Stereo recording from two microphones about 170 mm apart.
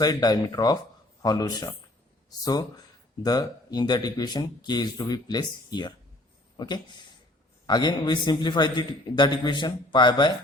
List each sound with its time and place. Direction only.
0.0 s speech: 25° left (ahead or behind)